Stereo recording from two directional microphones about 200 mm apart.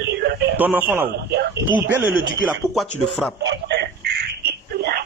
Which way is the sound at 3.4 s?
55° right (ahead or behind).